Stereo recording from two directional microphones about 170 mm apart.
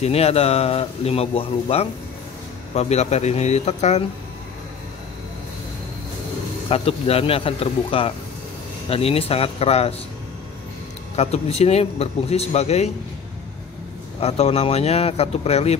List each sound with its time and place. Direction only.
0.0 s speech: 35° left (ahead or behind)
6.7 s speech: 35° left (ahead or behind)
11.1 s speech: 40° left (ahead or behind)
14.2 s speech: 40° left (ahead or behind)